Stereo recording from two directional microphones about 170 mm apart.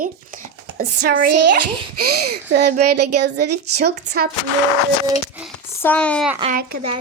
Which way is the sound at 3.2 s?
80° right.